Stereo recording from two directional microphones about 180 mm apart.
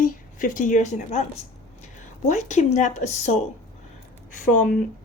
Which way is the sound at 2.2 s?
40° left (ahead or behind).